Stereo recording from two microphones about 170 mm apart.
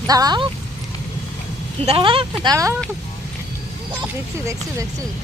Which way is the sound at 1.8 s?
30° right (ahead or behind).